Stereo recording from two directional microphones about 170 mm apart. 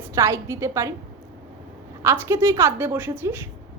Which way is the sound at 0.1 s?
15° right (ahead or behind).